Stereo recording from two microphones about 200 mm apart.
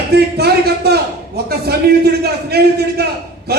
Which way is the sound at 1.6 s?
50° right (ahead or behind).